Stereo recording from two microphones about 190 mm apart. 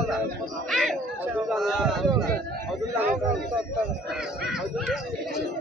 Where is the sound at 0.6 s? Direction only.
Centre (ahead or behind).